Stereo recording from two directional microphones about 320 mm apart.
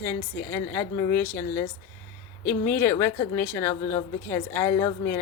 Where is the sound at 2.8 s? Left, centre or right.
Centre.